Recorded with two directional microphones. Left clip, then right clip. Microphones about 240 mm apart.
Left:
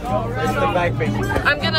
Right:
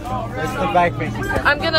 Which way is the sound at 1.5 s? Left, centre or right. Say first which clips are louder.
Right 2 dB; centre.